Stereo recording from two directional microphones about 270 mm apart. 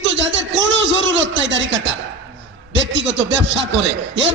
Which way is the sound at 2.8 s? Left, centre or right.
Right.